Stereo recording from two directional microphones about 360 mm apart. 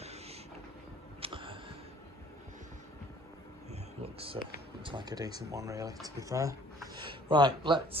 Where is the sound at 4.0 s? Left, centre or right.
Centre.